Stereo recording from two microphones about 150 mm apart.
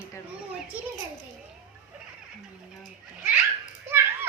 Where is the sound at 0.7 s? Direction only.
10° right (ahead or behind).